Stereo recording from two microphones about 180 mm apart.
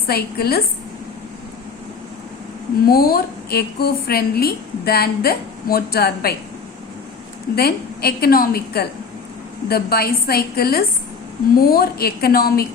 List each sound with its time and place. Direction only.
0.1 s a woman's voice: 60° left (ahead or behind)
2.8 s a woman's voice: 55° left (ahead or behind)
7.5 s a woman's voice: 60° left (ahead or behind)